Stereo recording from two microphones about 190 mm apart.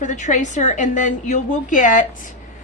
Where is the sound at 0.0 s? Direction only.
40° left (ahead or behind).